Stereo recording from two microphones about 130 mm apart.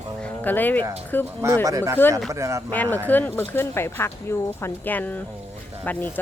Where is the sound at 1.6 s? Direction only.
25° right (ahead or behind).